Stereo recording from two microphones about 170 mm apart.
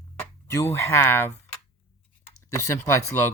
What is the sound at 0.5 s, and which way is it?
Speech, 15° left (ahead or behind).